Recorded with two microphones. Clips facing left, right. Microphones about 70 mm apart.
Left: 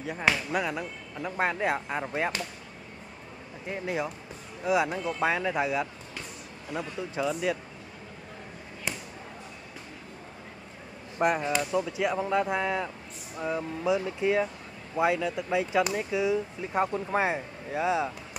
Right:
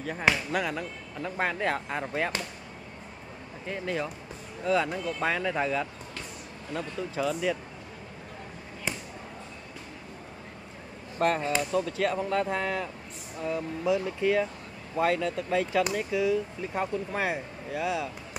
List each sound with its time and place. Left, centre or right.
0.0 s speech: centre
0.6 s speech: centre
3.6 s speech: centre
11.1 s speech: centre